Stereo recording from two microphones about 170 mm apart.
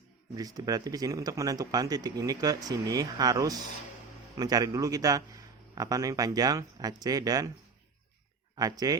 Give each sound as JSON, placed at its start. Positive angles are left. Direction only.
{"t": 0.3, "sound": "speech", "side_deg": -20}
{"t": 8.5, "sound": "speech", "side_deg": -20}